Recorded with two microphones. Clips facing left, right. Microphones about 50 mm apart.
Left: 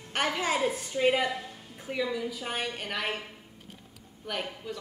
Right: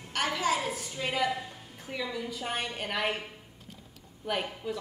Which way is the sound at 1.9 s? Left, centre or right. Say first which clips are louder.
Left 4 dB; centre.